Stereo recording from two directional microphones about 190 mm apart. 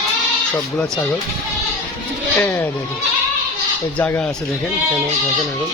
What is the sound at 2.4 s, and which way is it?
Speech, 10° left (ahead or behind).